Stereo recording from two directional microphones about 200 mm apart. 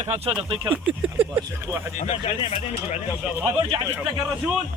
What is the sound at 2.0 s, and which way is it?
Speech, 30° left (ahead or behind).